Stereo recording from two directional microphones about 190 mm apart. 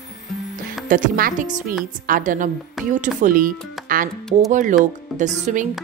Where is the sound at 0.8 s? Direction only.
45° right (ahead or behind).